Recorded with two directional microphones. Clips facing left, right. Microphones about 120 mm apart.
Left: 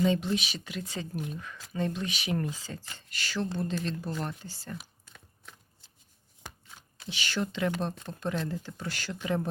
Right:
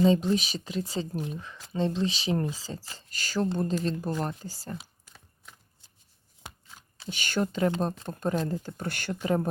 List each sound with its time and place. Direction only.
0.0 s speech: 35° right (ahead or behind)
7.1 s speech: 45° right (ahead or behind)
9.2 s speech: 40° right (ahead or behind)